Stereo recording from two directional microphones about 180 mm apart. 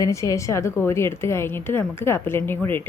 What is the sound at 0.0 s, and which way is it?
A woman's voice, 15° left (ahead or behind).